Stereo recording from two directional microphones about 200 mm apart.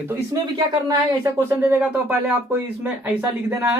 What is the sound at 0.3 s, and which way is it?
Speech, 20° right (ahead or behind).